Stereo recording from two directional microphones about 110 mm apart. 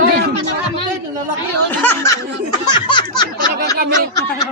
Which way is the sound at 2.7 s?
45° left (ahead or behind).